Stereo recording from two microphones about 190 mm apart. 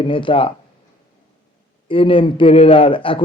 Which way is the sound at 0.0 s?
25° left (ahead or behind).